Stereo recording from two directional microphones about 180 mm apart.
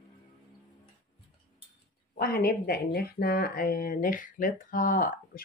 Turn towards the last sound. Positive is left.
turn(degrees=50)  # may be behind; listen again after turning